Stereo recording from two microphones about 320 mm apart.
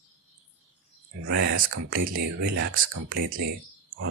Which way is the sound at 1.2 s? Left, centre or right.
Right.